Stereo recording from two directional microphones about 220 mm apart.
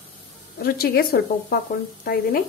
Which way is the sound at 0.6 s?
45° left (ahead or behind).